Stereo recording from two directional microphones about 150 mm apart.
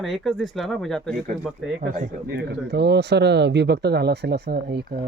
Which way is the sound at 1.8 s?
70° right (ahead or behind).